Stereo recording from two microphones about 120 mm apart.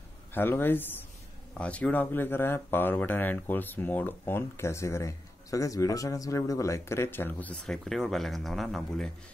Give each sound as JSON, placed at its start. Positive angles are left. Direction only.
{"t": 0.3, "sound": "speech", "side_deg": 15}